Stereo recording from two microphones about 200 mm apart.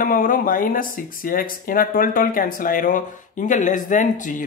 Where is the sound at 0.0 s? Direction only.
45° left (ahead or behind).